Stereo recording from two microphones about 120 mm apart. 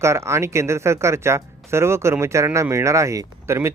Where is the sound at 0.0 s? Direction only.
25° right (ahead or behind).